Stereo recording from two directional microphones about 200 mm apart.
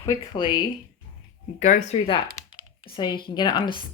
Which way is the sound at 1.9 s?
25° left (ahead or behind).